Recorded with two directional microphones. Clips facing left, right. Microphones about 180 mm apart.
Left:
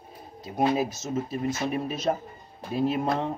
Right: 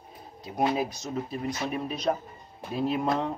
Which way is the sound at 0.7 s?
5° left (ahead or behind).